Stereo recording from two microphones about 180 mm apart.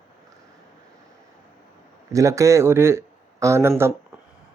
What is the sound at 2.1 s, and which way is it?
Speech, 15° right (ahead or behind).